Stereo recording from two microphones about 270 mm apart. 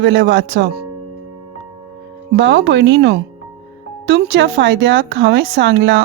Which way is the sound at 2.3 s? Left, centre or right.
Right.